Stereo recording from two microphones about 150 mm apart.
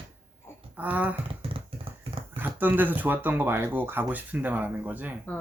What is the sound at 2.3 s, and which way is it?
Speech, 10° right (ahead or behind).